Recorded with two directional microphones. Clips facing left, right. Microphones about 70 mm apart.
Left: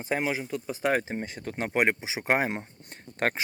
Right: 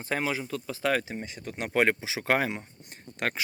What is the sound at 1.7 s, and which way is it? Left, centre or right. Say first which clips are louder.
Speech: right 1 dB; left.